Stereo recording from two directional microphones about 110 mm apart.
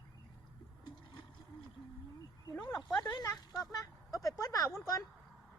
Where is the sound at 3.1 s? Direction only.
35° left (ahead or behind).